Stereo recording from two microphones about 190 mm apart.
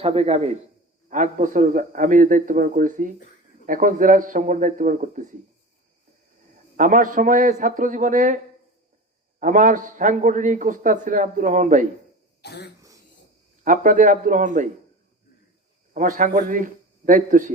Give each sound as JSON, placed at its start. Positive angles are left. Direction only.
{"t": 0.0, "sound": "a man's voice", "side_deg": -30}
{"t": 6.7, "sound": "a man's voice", "side_deg": -45}
{"t": 9.4, "sound": "a man's voice", "side_deg": -45}
{"t": 12.4, "sound": "throat clearing", "side_deg": 60}
{"t": 13.7, "sound": "a man's voice", "side_deg": -45}
{"t": 16.0, "sound": "a man's voice", "side_deg": -45}